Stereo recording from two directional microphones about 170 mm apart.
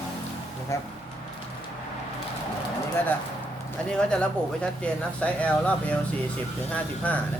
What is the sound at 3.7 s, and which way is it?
Speech, 5° left (ahead or behind).